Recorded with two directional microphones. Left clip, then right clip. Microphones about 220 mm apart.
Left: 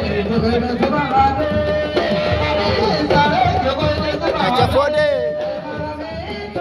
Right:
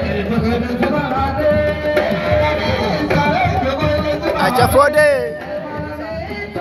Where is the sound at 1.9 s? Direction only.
25° left (ahead or behind).